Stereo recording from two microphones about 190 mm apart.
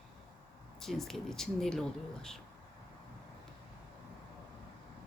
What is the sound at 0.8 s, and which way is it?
Speech, centre (ahead or behind).